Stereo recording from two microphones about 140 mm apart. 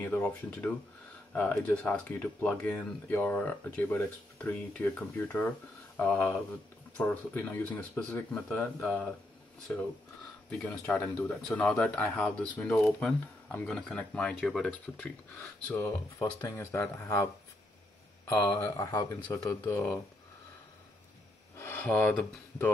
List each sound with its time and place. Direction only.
0.0 s speech: 10° left (ahead or behind)
15.7 s speech: 20° left (ahead or behind)
16.5 s speech: 15° left (ahead or behind)
18.6 s speech: 25° left (ahead or behind)
21.5 s speech: 15° left (ahead or behind)